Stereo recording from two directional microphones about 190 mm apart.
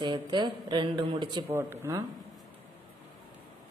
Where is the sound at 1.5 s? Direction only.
10° right (ahead or behind).